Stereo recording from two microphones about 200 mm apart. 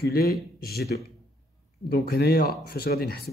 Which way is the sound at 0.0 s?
50° left (ahead or behind).